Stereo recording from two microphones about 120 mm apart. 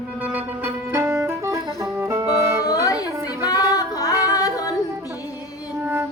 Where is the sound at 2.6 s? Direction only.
30° left (ahead or behind).